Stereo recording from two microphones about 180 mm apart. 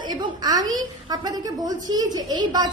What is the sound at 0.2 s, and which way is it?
A woman's voice, 20° right (ahead or behind).